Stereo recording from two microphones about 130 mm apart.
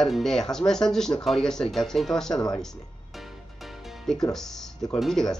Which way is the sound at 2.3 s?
30° left (ahead or behind).